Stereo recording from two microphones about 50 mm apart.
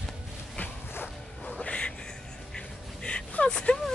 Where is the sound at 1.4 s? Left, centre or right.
Left.